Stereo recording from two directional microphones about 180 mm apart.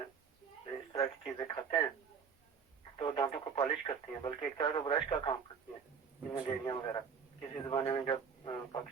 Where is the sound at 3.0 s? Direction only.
25° left (ahead or behind).